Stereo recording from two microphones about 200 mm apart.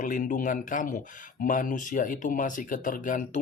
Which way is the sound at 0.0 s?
40° left (ahead or behind).